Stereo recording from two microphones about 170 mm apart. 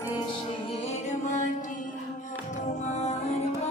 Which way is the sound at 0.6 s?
35° left (ahead or behind).